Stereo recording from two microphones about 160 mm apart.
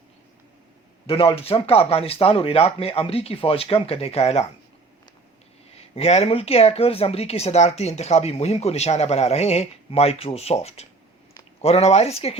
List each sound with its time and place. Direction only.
1.0 s speech: 35° left (ahead or behind)
5.7 s speech: 40° left (ahead or behind)